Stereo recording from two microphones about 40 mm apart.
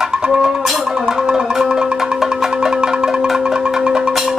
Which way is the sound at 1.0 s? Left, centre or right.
Centre.